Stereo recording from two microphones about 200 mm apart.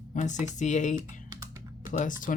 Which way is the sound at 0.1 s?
35° left (ahead or behind).